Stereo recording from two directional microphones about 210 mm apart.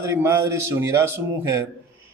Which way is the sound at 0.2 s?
10° right (ahead or behind).